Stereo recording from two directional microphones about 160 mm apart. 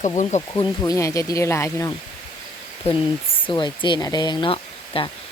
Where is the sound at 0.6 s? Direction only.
20° left (ahead or behind).